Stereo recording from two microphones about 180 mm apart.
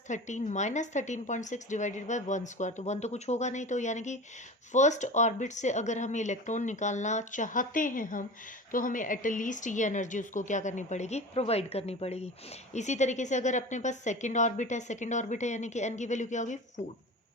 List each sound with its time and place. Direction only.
0.1 s a woman's voice: 40° left (ahead or behind)